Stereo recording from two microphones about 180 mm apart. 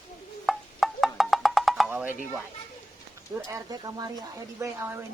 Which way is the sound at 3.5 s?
20° right (ahead or behind).